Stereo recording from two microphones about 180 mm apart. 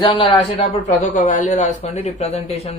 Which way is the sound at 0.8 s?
40° left (ahead or behind).